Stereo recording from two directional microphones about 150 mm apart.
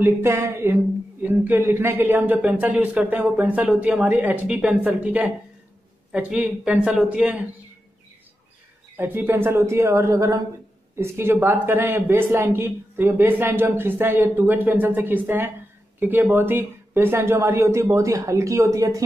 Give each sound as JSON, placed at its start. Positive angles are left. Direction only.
{"t": 0.0, "sound": "speech", "side_deg": -15}
{"t": 8.9, "sound": "speech", "side_deg": -15}